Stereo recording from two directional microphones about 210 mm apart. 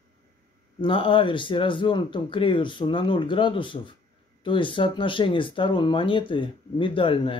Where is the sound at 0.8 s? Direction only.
25° left (ahead or behind).